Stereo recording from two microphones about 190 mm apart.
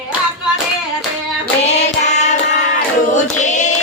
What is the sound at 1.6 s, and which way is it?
Music, 35° left (ahead or behind).